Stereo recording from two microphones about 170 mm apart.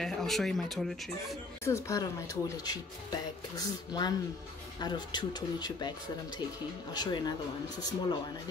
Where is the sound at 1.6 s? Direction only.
20° left (ahead or behind).